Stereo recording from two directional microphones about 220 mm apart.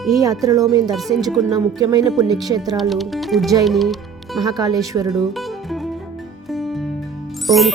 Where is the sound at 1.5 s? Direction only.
15° right (ahead or behind).